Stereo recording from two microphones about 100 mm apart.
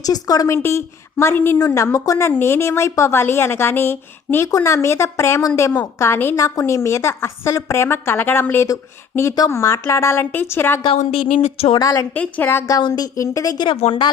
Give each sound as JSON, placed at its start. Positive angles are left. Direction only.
{"t": 0.0, "sound": "a woman's voice", "side_deg": 40}
{"t": 0.5, "sound": "a woman's voice", "side_deg": 25}
{"t": 10.8, "sound": "speech", "side_deg": 65}
{"t": 11.8, "sound": "a woman's voice", "side_deg": 35}
{"t": 12.1, "sound": "a woman's voice", "side_deg": 15}
{"t": 12.5, "sound": "a woman's voice", "side_deg": 25}
{"t": 12.7, "sound": "a woman's voice", "side_deg": 40}
{"t": 13.7, "sound": "a woman's voice", "side_deg": 85}